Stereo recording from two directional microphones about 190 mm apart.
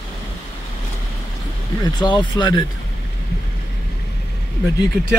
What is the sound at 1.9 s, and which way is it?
Speech, 25° left (ahead or behind).